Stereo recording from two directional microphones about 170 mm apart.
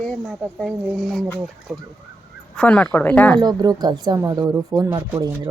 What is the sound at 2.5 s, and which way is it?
Speech, 5° left (ahead or behind).